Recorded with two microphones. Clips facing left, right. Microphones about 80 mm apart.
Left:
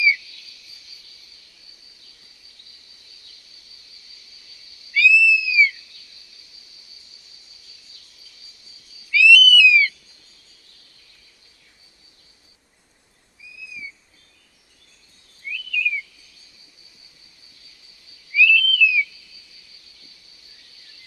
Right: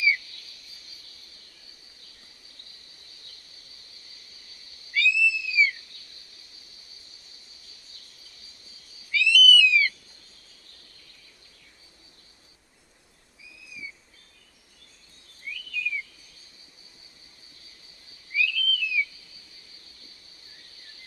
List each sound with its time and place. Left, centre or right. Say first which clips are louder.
0.0 s a sound: left 4 dB; right
2.0 s cricket: even; right
15.5 s bird vocalization: left 7 dB; right
17.6 s owl: even; right